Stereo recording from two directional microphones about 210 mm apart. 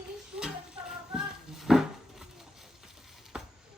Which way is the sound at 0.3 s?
5° right (ahead or behind).